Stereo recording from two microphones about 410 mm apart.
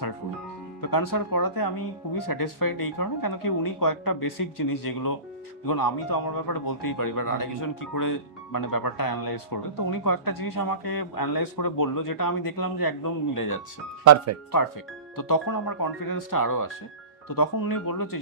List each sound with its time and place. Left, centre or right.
0.7 s a man's voice: left
15.1 s a man's voice: left